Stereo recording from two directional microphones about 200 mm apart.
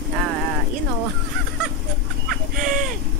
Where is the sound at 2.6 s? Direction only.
45° right (ahead or behind).